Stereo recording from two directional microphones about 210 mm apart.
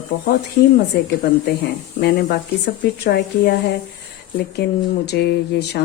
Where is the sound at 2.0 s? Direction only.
50° left (ahead or behind).